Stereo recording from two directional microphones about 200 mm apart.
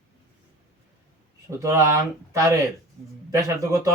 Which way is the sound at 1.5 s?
15° right (ahead or behind).